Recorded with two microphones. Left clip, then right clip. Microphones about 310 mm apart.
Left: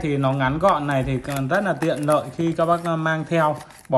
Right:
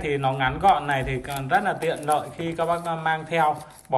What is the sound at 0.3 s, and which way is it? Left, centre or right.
A man's voice, centre.